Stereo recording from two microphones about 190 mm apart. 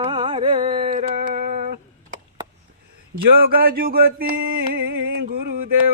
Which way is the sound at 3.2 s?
50° right (ahead or behind).